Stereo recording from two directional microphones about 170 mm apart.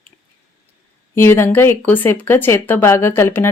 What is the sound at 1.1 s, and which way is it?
Speech, 15° left (ahead or behind).